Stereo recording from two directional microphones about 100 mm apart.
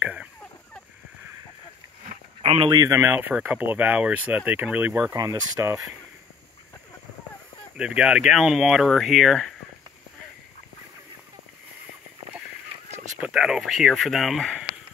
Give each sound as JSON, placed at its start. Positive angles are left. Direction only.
{"t": 2.4, "sound": "a sound", "side_deg": -75}
{"t": 2.7, "sound": "speech", "side_deg": -40}
{"t": 3.0, "sound": "speech", "side_deg": -20}
{"t": 5.1, "sound": "speech", "side_deg": -35}
{"t": 7.7, "sound": "speech", "side_deg": -10}
{"t": 13.2, "sound": "speech", "side_deg": -5}